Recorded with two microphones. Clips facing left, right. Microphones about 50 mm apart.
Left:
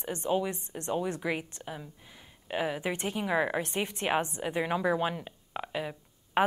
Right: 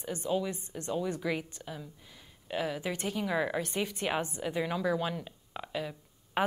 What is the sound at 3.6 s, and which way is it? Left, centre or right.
A woman's voice, left.